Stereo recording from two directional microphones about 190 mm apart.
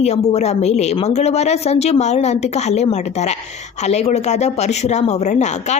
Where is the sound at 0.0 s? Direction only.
35° left (ahead or behind).